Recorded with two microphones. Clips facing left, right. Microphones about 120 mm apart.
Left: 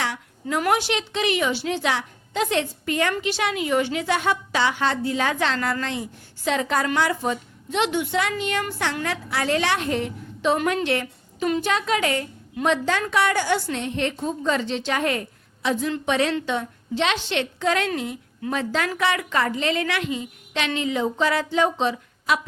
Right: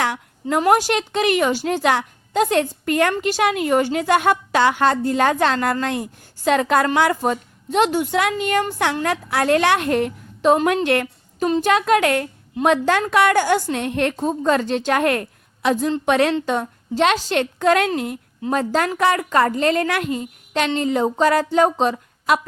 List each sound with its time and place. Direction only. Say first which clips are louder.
0.7 s a woman's voice: right 6 dB; 45° right (ahead or behind)
10.8 s a sound: right 5 dB; 55° right (ahead or behind)
11.6 s a woman's voice: right 6 dB; 55° right (ahead or behind)
18.5 s a woman's voice: right 5 dB; 45° right (ahead or behind)